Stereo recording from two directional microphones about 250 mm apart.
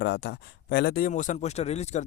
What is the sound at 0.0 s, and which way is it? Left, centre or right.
Speech, left.